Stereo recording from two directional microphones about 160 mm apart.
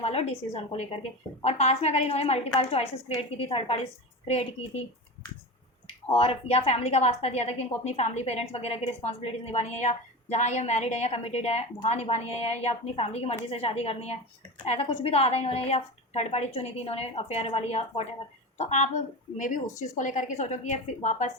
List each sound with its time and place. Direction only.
0.0 s a woman's voice: 40° left (ahead or behind)
6.1 s a woman's voice: 35° left (ahead or behind)
20.0 s a woman's voice: 50° left (ahead or behind)